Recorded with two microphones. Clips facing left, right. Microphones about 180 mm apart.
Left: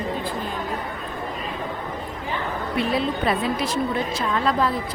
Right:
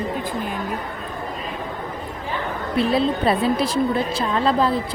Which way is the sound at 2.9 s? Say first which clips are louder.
Right 4 dB; 30° right (ahead or behind).